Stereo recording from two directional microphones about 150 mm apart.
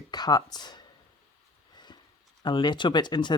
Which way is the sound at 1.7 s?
30° left (ahead or behind).